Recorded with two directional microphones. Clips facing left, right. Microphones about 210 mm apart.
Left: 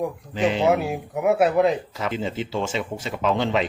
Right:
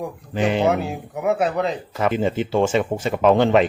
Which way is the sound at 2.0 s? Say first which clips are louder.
Right 6 dB; 55° right (ahead or behind).